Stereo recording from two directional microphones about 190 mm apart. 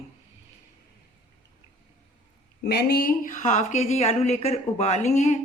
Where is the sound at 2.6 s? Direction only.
60° left (ahead or behind); by 5.4 s 40° left (ahead or behind).